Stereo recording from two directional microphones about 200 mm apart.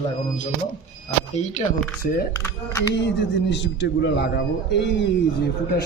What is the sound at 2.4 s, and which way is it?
Speech, 15° left (ahead or behind).